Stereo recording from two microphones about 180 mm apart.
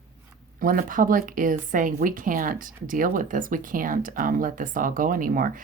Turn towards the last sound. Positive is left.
turn(degrees=-50)  # may be behind; listen again after turning